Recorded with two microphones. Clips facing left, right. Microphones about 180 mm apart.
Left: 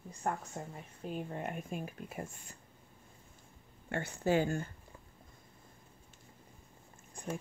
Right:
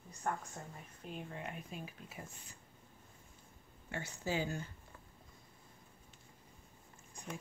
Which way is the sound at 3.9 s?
60° left (ahead or behind).